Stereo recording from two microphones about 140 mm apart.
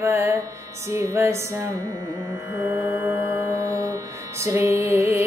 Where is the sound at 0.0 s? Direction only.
20° right (ahead or behind).